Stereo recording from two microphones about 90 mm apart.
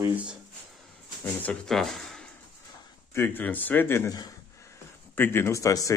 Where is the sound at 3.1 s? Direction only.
25° left (ahead or behind).